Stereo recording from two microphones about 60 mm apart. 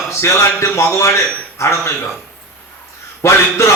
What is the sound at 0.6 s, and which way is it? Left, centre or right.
A man's voice, left.